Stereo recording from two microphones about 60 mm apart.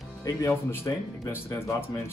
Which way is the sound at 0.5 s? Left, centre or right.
Left.